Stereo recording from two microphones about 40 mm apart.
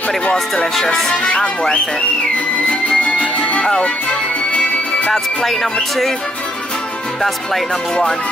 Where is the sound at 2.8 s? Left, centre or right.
Left.